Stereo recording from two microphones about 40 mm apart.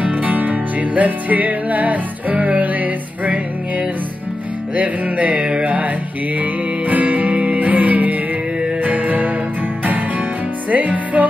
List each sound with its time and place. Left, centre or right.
0.0 s music: right
4.7 s music: right
6.9 s music: right
10.7 s music: right